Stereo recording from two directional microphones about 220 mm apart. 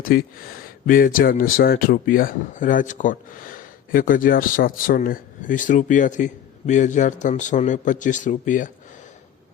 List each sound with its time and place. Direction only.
0.0 s a man's voice: 40° left (ahead or behind)